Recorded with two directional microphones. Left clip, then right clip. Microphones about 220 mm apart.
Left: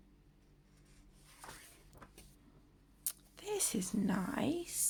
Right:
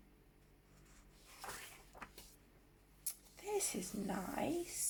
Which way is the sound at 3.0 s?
40° left (ahead or behind).